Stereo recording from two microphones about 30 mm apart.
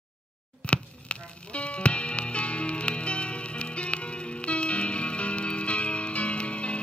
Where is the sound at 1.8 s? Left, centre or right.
Left.